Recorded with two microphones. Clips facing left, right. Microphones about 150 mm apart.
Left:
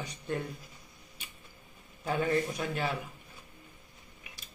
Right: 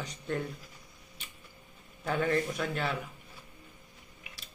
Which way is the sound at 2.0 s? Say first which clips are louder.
Even; 20° left (ahead or behind).